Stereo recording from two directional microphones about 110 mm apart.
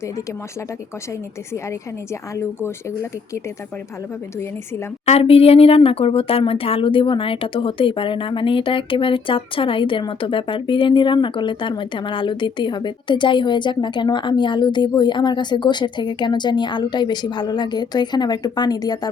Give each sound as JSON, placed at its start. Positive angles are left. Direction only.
{"t": 2.3, "sound": "speech", "side_deg": 25}
{"t": 5.0, "sound": "a woman's voice", "side_deg": 65}